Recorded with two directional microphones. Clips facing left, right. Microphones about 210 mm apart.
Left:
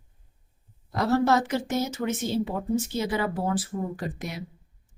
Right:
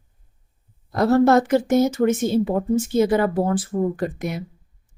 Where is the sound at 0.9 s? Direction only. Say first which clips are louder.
Right 7 dB; 50° right (ahead or behind).